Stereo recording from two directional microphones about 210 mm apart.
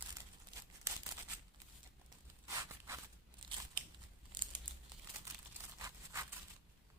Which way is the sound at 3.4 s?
20° right (ahead or behind).